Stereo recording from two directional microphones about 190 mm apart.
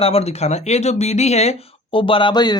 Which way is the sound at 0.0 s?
30° left (ahead or behind).